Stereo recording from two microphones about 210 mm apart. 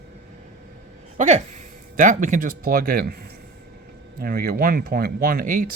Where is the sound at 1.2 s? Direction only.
35° right (ahead or behind).